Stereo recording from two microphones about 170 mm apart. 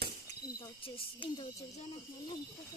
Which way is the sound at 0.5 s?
25° left (ahead or behind).